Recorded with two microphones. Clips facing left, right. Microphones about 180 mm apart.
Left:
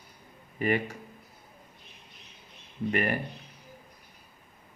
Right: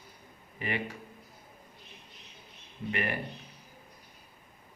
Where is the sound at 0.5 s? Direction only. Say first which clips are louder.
Left 8 dB; 45° left (ahead or behind).